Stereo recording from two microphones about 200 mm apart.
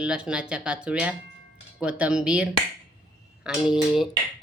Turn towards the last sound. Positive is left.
turn(degrees=0)  # may be behind; listen again after turning